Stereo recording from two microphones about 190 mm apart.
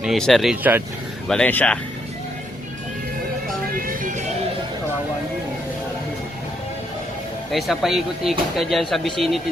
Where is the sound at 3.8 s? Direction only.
45° right (ahead or behind).